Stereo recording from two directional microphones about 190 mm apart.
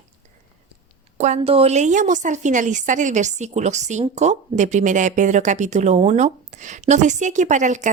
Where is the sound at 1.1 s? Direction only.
35° right (ahead or behind).